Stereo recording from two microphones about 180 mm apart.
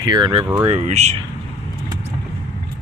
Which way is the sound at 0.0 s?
25° right (ahead or behind).